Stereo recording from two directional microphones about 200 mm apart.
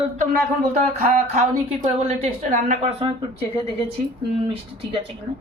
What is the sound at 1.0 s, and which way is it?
A woman's voice, 35° right (ahead or behind).